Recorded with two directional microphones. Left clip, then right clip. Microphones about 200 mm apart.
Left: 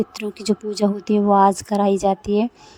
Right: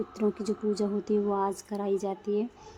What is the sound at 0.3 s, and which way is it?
Speech, 45° left (ahead or behind).